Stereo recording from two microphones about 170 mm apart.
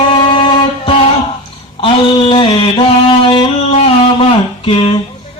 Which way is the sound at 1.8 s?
30° left (ahead or behind).